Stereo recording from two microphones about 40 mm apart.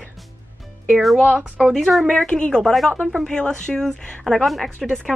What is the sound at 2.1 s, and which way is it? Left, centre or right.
Speech, left.